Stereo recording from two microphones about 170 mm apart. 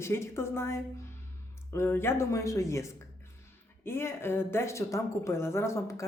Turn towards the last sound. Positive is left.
turn(degrees=15)  # may be behind; listen again after turning